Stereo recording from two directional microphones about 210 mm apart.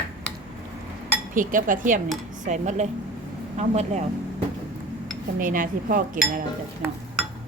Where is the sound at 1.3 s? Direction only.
40° right (ahead or behind).